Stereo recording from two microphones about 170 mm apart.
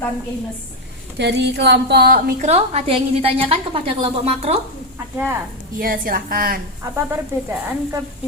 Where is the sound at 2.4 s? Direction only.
40° right (ahead or behind).